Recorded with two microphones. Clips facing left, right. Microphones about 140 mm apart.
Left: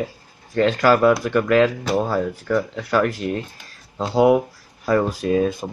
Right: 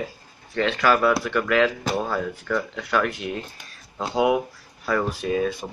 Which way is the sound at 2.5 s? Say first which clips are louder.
Left 4 dB; 25° left (ahead or behind).